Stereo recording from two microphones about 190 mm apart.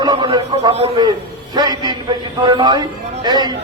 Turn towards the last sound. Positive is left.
turn(degrees=-20)  # may be behind; listen again after turning